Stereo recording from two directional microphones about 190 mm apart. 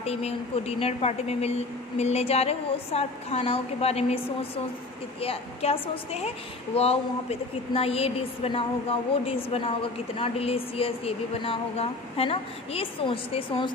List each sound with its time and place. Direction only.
0.0 s a woman's voice: 35° left (ahead or behind)